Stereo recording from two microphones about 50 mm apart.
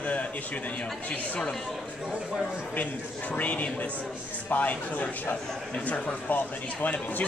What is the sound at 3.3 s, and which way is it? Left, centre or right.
Speech, left.